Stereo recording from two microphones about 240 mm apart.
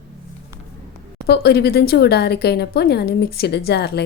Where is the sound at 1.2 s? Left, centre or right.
Left.